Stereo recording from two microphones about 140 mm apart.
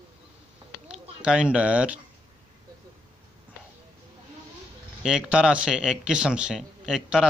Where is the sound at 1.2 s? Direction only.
5° right (ahead or behind).